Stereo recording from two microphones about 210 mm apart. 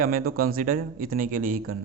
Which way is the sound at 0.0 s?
45° right (ahead or behind).